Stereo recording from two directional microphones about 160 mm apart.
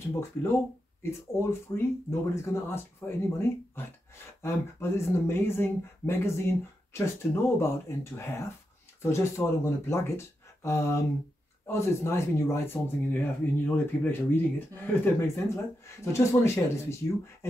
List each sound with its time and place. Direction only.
0.1 s speech: 15° left (ahead or behind)
1.8 s speech: 15° left (ahead or behind)